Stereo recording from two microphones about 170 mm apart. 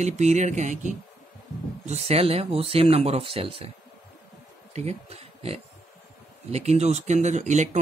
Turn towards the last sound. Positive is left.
turn(degrees=-45)  # may be behind; listen again after turning